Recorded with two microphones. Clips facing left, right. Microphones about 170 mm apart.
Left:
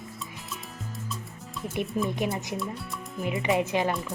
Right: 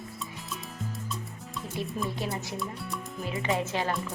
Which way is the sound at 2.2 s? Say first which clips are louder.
Left 3 dB; 15° left (ahead or behind).